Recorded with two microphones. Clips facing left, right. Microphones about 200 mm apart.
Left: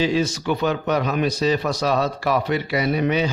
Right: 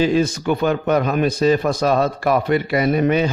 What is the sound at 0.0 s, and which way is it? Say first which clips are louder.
A man's voice: right 4 dB; 50° right (ahead or behind).